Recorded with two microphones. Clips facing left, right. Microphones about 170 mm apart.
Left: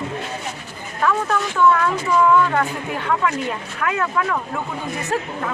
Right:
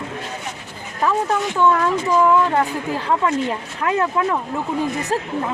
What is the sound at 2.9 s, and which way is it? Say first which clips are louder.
Speech: right 2 dB; 25° right (ahead or behind).